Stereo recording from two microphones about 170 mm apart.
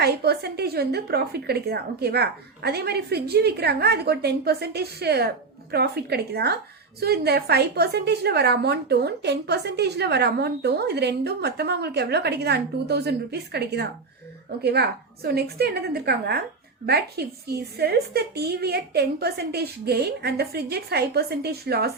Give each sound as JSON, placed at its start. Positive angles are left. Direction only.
{"t": 0.0, "sound": "a woman's voice", "side_deg": -70}